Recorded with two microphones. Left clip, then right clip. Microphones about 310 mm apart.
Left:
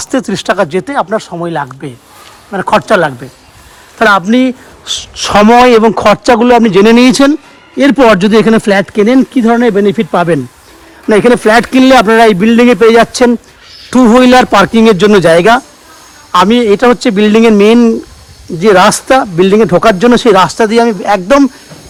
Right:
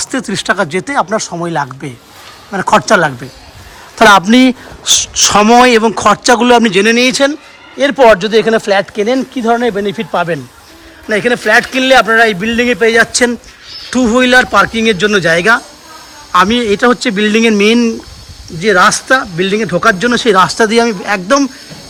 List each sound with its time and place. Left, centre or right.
0.0 s speech: centre
11.6 s speech: centre